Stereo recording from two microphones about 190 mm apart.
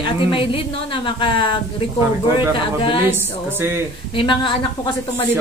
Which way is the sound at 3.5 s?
10° right (ahead or behind).